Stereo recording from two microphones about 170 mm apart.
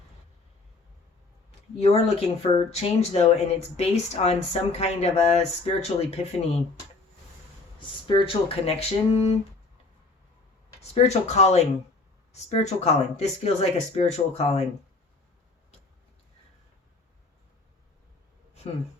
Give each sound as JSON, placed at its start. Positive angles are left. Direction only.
{"t": 1.5, "sound": "speech", "side_deg": 40}
{"t": 8.0, "sound": "speech", "side_deg": 30}
{"t": 10.9, "sound": "speech", "side_deg": 40}